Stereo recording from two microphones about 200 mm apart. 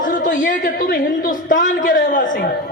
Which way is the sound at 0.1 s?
45° left (ahead or behind).